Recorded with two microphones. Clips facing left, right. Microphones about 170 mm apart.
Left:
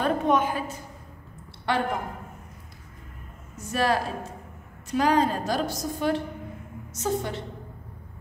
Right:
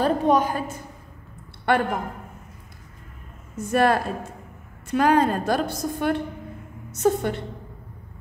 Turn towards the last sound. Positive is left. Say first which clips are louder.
# right 6 dB
turn(degrees=-55)  # may be behind; listen again after turning